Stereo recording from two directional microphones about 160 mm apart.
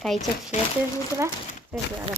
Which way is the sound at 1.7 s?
5° right (ahead or behind).